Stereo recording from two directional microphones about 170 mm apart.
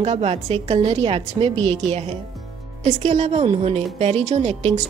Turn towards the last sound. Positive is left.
turn(degrees=-40)  # may be behind; listen again after turning